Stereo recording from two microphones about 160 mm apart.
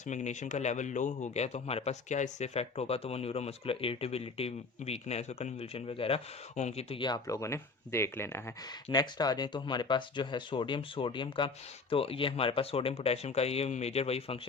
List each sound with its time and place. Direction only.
0.1 s a man's voice: 50° left (ahead or behind)